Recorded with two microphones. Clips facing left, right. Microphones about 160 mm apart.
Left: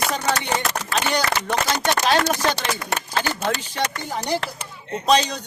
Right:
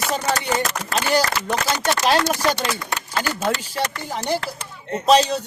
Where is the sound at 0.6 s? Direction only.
40° right (ahead or behind).